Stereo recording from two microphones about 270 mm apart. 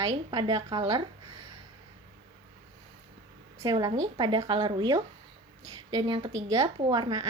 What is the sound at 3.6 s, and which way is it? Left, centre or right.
A woman's voice, centre.